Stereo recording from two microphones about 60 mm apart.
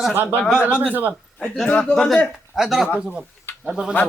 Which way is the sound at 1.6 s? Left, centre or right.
Left.